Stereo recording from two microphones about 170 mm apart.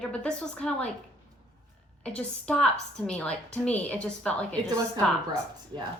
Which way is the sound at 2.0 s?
5° left (ahead or behind).